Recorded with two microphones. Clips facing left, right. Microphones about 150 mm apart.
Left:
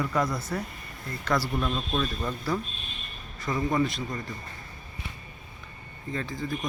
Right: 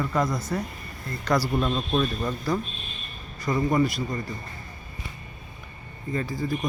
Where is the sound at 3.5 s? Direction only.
Centre (ahead or behind).